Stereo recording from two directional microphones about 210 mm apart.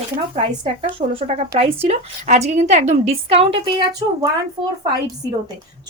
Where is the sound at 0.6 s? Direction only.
25° right (ahead or behind).